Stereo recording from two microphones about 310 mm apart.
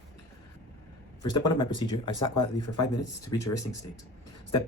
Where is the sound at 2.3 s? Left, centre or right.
Left.